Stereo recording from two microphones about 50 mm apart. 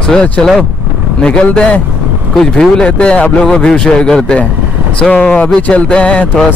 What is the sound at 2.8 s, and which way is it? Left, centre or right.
Speech, left.